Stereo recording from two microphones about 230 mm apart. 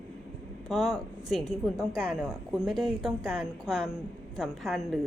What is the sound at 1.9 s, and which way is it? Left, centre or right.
Speech, left.